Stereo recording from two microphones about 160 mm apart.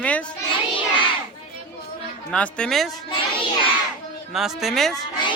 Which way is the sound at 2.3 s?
5° left (ahead or behind).